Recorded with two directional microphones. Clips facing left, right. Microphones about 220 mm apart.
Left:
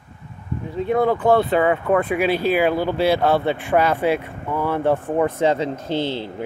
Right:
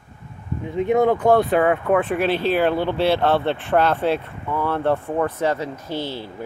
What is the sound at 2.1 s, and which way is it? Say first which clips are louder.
Speech: left 1 dB; 10° left (ahead or behind).